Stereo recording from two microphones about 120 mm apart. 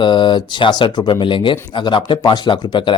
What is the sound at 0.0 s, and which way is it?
Speech, 40° left (ahead or behind).